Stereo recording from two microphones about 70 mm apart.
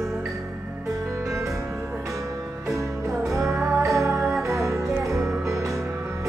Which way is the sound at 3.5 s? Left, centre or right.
Right.